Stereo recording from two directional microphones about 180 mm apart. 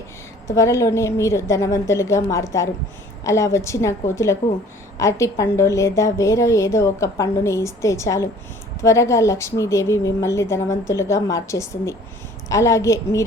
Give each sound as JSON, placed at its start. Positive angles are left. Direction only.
{"t": 0.4, "sound": "a woman's voice", "side_deg": 15}